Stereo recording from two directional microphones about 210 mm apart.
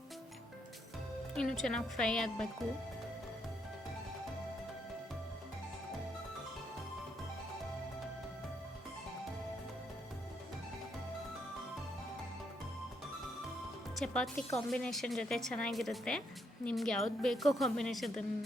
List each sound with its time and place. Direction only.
1.4 s a woman's voice: centre (ahead or behind)
14.0 s a woman's voice: 5° left (ahead or behind)